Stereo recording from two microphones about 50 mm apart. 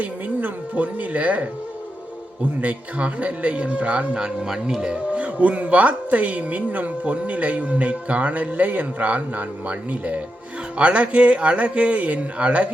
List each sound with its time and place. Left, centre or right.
0.0 s speech: right
2.6 s speech: right
4.2 s speech: centre; by 12.6 s right